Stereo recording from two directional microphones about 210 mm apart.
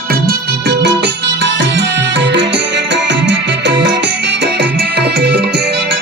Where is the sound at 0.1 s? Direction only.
50° right (ahead or behind).